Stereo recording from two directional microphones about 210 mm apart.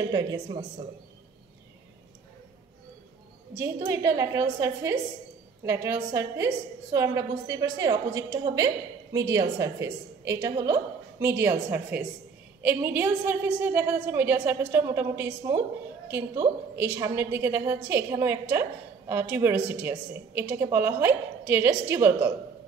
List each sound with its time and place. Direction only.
0.1 s a woman's voice: 20° right (ahead or behind)
3.5 s a woman's voice: 10° right (ahead or behind)
16.7 s a woman's voice: 10° right (ahead or behind)